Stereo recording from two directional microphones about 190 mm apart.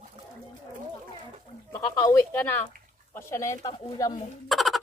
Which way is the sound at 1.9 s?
15° left (ahead or behind).